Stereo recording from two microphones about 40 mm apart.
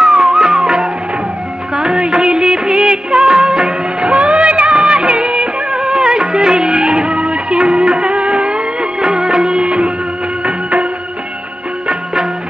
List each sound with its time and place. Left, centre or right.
0.0 s music: centre
1.8 s music of bollywood: right
10.4 s music: right